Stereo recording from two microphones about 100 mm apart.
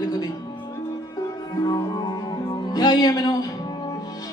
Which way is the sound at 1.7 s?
45° left (ahead or behind).